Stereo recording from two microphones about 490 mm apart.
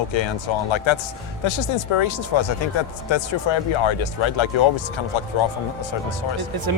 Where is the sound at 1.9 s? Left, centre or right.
Left.